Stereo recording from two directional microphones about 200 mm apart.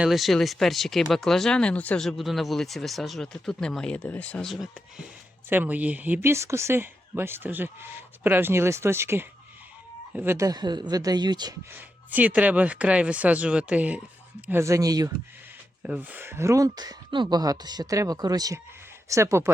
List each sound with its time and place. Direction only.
0.0 s speech: centre (ahead or behind); by 11.5 s 20° right (ahead or behind)
11.7 s speech: 10° right (ahead or behind)
15.8 s speech: 10° right (ahead or behind)